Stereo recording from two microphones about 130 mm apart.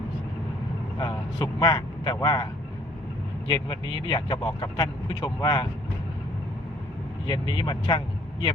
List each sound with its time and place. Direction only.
0.9 s vehicle: 35° left (ahead or behind)
2.2 s speech: 40° left (ahead or behind)
3.5 s speech: 40° left (ahead or behind)
7.3 s speech: 40° left (ahead or behind)